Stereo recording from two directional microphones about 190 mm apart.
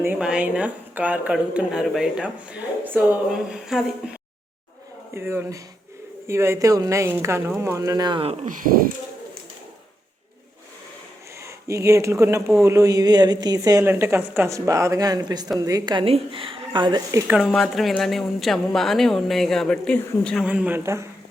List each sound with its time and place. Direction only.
0.0 s speech: 5° right (ahead or behind)
5.1 s a woman's voice: 15° right (ahead or behind)
8.4 s speech: 45° right (ahead or behind)
11.4 s a woman's voice: 15° right (ahead or behind)
17.3 s speech: centre (ahead or behind)
20.4 s a woman's voice: 5° right (ahead or behind)